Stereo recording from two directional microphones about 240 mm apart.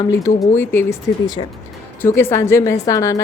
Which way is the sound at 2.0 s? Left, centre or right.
Centre.